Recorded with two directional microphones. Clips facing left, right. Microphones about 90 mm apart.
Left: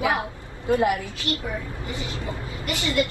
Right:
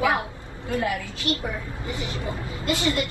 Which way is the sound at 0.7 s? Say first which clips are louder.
Left 5 dB; 20° left (ahead or behind).